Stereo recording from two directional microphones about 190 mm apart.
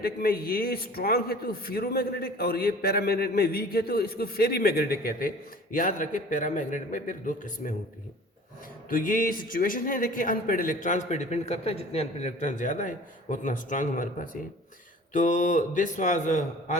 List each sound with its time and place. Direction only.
0.0 s a man's voice: 50° left (ahead or behind)
8.9 s a man's voice: 45° left (ahead or behind)
15.1 s a man's voice: 40° left (ahead or behind)